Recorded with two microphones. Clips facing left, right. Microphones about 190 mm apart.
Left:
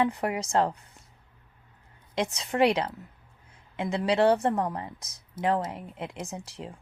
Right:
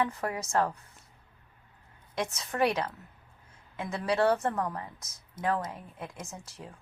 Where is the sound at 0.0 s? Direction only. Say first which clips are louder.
Left 4 dB; 20° left (ahead or behind).